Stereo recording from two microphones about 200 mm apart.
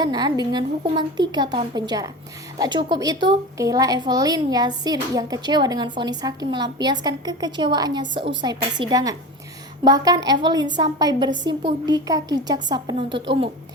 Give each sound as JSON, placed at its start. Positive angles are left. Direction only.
{"t": 0.0, "sound": "a woman's voice", "side_deg": -20}